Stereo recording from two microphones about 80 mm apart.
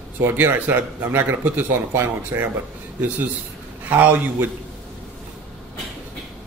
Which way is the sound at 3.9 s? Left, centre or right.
Right.